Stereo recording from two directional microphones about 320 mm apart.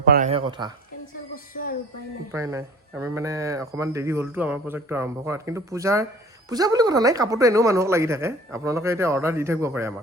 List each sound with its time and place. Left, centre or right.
0.0 s speech: right
2.3 s speech: centre